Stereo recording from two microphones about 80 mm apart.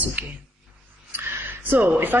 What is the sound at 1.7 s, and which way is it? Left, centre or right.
Speech, right.